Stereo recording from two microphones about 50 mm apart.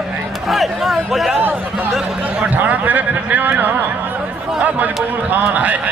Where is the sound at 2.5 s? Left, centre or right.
Right.